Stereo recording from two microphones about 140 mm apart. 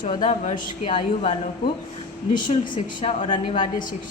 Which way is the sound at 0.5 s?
40° left (ahead or behind).